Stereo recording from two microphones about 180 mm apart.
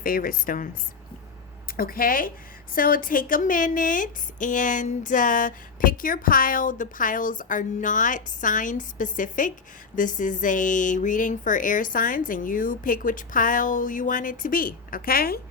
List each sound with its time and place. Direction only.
0.0 s a woman's voice: 50° left (ahead or behind)
1.7 s a woman's voice: 55° left (ahead or behind)